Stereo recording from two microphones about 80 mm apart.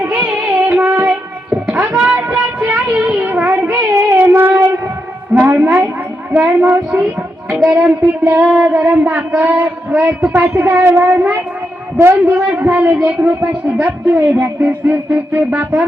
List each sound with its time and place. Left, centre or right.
0.0 s music: centre
5.3 s a sound: right
6.3 s child singing: centre
11.0 s speech: centre
11.9 s child singing: right
13.1 s speech: centre
14.6 s child singing: centre